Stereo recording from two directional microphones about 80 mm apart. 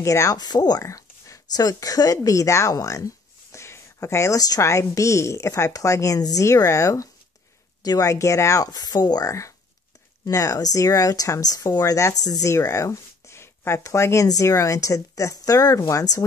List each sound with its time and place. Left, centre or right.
0.0 s a woman's voice: left
0.4 s speech: left
0.8 s a woman's voice: left
10.2 s speech: left